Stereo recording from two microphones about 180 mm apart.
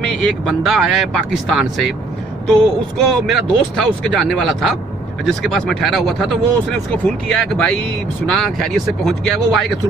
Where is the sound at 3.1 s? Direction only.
5° left (ahead or behind).